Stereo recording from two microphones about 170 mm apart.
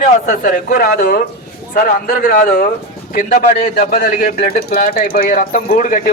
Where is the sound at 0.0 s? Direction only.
55° left (ahead or behind).